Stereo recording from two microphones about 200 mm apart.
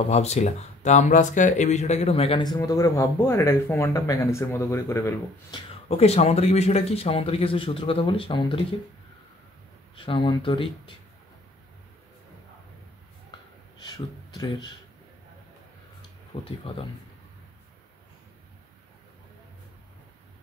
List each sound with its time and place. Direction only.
0.1 s speech: 35° left (ahead or behind); by 5.6 s 15° left (ahead or behind)
5.9 s speech: 30° left (ahead or behind)
9.9 s speech: 25° left (ahead or behind)
13.8 s speech: 20° left (ahead or behind)
16.3 s speech: 25° left (ahead or behind)